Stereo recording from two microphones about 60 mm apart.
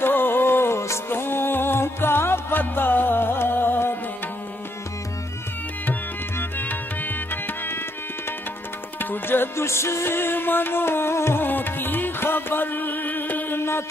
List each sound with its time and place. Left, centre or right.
0.0 s music: left
6.6 s music: left
9.1 s music: left